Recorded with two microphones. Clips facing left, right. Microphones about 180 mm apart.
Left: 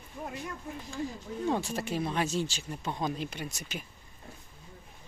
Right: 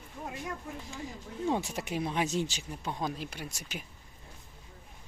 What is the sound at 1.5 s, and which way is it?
Speech, 20° right (ahead or behind).